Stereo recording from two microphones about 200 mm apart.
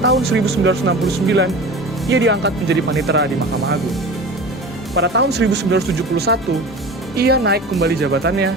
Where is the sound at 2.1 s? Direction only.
60° right (ahead or behind).